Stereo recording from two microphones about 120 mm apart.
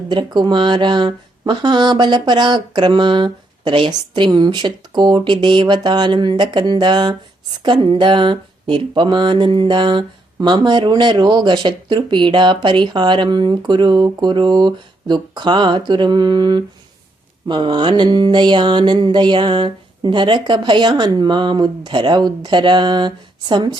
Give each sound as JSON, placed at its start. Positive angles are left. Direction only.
{"t": 0.1, "sound": "speech", "side_deg": -40}